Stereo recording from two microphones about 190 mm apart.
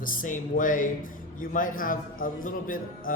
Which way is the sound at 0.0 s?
45° left (ahead or behind).